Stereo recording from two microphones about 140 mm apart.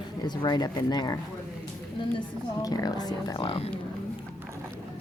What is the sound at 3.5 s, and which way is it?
Speech, 45° left (ahead or behind).